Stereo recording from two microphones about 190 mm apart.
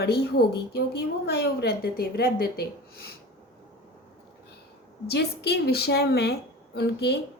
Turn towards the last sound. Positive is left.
turn(degrees=60)  # may be behind; listen again after turning